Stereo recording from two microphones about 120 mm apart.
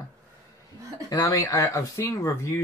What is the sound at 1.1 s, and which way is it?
Speech, 30° left (ahead or behind).